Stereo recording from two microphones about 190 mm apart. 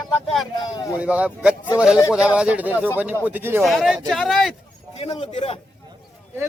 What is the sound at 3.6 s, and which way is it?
Speech, centre (ahead or behind).